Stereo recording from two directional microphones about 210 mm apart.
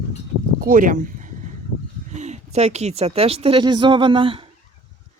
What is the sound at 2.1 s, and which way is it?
Speech, 35° right (ahead or behind).